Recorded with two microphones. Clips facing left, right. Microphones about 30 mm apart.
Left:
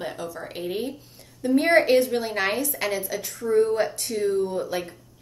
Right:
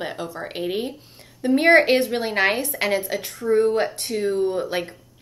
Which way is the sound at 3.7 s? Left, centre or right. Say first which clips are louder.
Right 2 dB; right.